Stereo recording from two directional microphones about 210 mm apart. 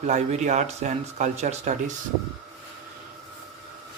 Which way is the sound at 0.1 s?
35° right (ahead or behind).